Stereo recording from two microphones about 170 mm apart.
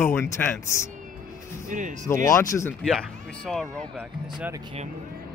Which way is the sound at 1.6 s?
50° right (ahead or behind).